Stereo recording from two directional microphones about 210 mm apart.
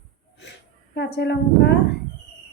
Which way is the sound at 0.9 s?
55° left (ahead or behind).